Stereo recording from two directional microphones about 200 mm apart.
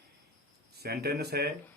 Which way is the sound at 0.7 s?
50° right (ahead or behind).